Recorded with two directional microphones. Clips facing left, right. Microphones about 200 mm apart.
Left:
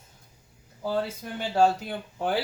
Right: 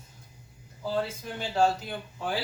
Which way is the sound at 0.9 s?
60° left (ahead or behind).